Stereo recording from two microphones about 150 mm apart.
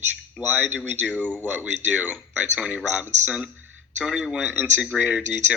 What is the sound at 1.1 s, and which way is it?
Speech, 10° left (ahead or behind).